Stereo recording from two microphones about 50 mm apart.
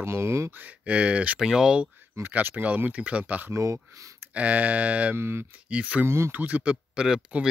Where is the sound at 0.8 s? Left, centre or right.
Right.